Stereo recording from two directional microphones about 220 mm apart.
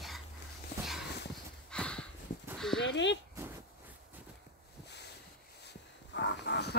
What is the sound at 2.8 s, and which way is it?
Speech, 55° left (ahead or behind).